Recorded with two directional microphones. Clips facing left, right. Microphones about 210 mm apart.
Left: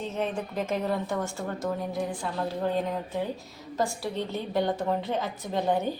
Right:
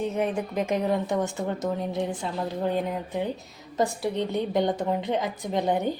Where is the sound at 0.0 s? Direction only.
15° right (ahead or behind).